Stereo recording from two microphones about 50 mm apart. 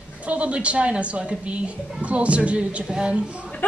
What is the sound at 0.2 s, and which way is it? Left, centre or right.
A woman's voice, right.